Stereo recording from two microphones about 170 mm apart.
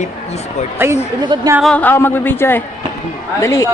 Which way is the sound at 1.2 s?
25° right (ahead or behind).